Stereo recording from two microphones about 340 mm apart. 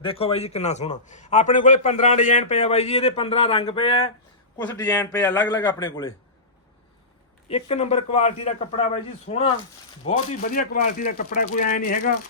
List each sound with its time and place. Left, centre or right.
0.0 s a man's voice: centre
4.5 s a man's voice: centre
7.4 s a man's voice: centre